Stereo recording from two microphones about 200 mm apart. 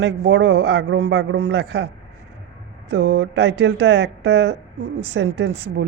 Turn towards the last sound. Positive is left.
turn(degrees=-60)  # may be behind; listen again after turning